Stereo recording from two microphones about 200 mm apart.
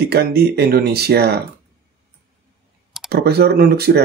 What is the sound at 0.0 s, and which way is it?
Speech, 50° right (ahead or behind).